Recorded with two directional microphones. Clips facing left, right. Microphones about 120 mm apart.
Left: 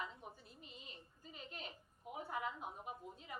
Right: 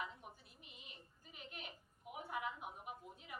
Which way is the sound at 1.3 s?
35° left (ahead or behind).